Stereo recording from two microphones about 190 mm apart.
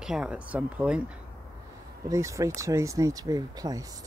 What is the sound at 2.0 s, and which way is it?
Speech, 15° right (ahead or behind).